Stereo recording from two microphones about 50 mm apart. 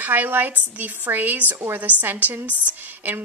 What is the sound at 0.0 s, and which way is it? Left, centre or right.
A woman's voice, right.